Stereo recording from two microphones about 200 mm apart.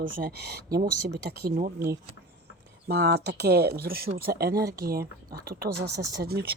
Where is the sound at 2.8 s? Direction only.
55° right (ahead or behind).